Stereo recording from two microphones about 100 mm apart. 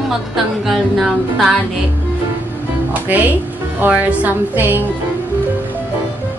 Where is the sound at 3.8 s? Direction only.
15° right (ahead or behind).